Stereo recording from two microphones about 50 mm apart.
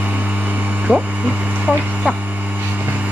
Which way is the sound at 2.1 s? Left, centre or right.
Right.